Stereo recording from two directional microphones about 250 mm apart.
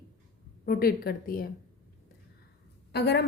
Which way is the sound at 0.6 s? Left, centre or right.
Left.